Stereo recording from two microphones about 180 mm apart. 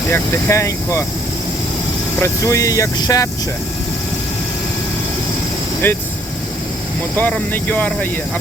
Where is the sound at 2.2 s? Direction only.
15° left (ahead or behind).